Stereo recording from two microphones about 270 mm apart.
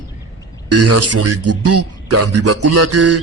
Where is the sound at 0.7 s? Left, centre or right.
Right.